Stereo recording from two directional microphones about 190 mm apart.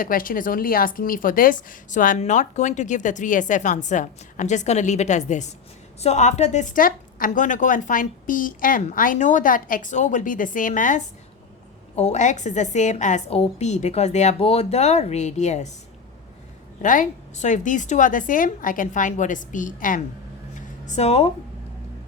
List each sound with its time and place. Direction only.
0.0 s a woman's voice: 45° left (ahead or behind)
16.8 s a woman's voice: 45° left (ahead or behind)
20.6 s a sound: 40° left (ahead or behind)